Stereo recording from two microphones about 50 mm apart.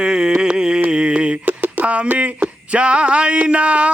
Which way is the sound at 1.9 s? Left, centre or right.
Right.